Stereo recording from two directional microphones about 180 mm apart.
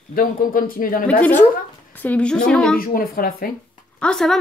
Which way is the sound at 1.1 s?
10° left (ahead or behind).